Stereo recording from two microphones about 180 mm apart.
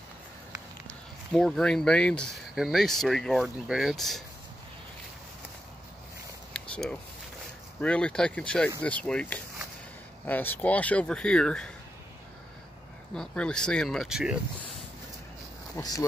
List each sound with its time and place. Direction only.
1.3 s speech: 5° left (ahead or behind)
6.5 s a sound: 5° left (ahead or behind)
7.8 s speech: 5° left (ahead or behind)
13.1 s speech: 5° left (ahead or behind)
15.7 s speech: 20° left (ahead or behind)